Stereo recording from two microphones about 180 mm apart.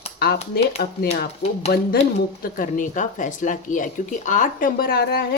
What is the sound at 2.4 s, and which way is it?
Speech, 50° left (ahead or behind).